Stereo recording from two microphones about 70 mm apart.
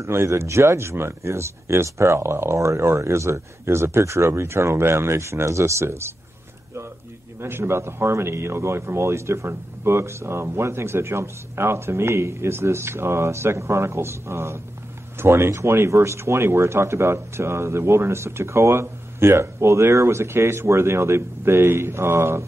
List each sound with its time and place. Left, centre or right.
0.0 s speech: right
7.3 s speech: right